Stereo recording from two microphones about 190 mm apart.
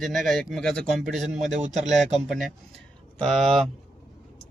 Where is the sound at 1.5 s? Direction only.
40° right (ahead or behind).